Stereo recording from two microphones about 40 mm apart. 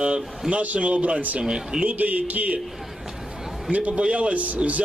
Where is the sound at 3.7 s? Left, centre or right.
Right.